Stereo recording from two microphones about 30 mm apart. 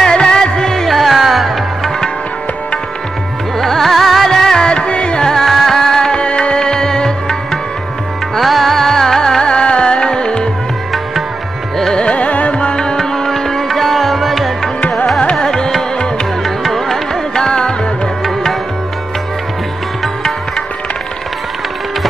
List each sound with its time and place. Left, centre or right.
0.0 s music: left
0.8 s music: centre
3.5 s music: centre
4.6 s music: left
5.2 s music: centre
6.1 s music: left
6.6 s music: left
8.4 s music: centre
9.4 s music: left
11.9 s carnatic music: left
12.7 s music: left; by 14.7 s centre
15.4 s music: left
16.4 s music: centre; by 17.7 s left